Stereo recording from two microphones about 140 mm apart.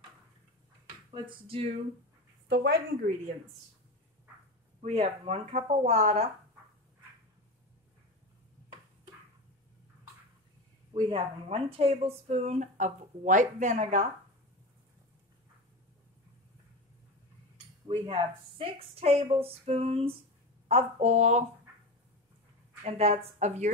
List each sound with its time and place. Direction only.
1.1 s a sound: 40° right (ahead or behind)
2.7 s a woman's voice: 90° right
4.8 s speech: 45° right (ahead or behind)
10.9 s speech: 40° right (ahead or behind)
17.8 s speech: 35° right (ahead or behind); by 21.5 s 55° right (ahead or behind)
22.8 s speech: 45° right (ahead or behind)